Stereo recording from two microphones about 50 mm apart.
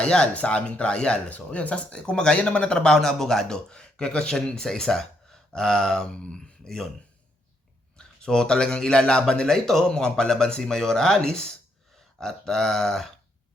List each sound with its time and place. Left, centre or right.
0.0 s speech: centre
7.9 s a man's voice: centre
9.5 s speech: centre